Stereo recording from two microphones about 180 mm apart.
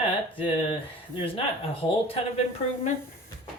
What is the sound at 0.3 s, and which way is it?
Speech, 30° left (ahead or behind).